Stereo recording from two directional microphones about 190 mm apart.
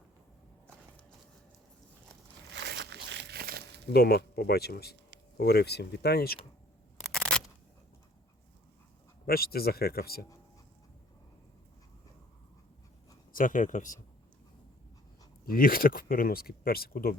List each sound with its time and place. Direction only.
2.5 s crumpling: 60° right (ahead or behind)
3.9 s speech: 55° left (ahead or behind)
7.0 s a sound: 5° left (ahead or behind)
9.2 s speech: 55° left (ahead or behind)
13.3 s speech: 45° left (ahead or behind)
15.4 s speech: 50° left (ahead or behind)